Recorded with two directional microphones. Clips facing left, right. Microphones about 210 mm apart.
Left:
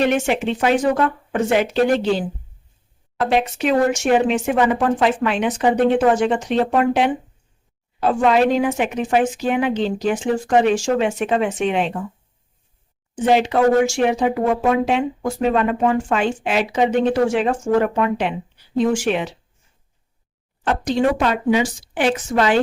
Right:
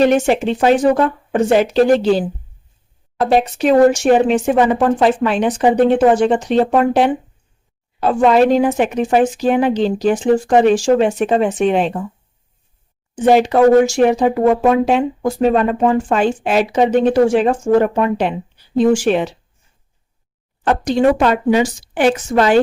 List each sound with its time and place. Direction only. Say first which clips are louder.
0.0 s speech: right 5 dB; 35° right (ahead or behind)
8.3 s speech: right 5 dB; 40° right (ahead or behind)
13.2 s speech: right 5 dB; 40° right (ahead or behind)
21.2 s a woman's voice: right 4 dB; 45° right (ahead or behind)